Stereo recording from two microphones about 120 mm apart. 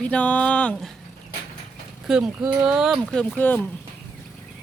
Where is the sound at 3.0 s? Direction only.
10° left (ahead or behind).